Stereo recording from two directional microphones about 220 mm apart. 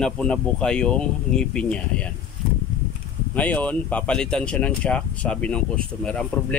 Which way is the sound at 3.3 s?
5° left (ahead or behind).